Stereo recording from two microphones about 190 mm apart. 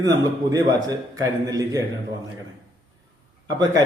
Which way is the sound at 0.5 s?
20° right (ahead or behind).